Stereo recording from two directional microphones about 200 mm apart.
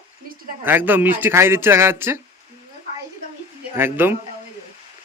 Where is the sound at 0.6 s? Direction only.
10° right (ahead or behind).